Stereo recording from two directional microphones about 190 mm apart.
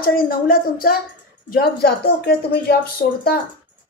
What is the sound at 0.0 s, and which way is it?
Speech, 50° left (ahead or behind).